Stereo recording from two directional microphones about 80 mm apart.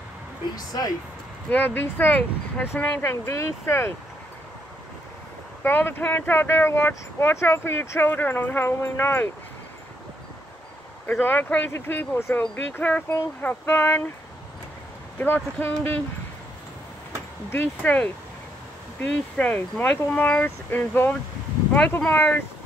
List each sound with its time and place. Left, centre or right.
0.6 s speech: left
1.5 s speech: left
5.6 s speech: left
11.1 s speech: left
15.1 s speech: left
17.5 s speech: left
19.1 s speech: centre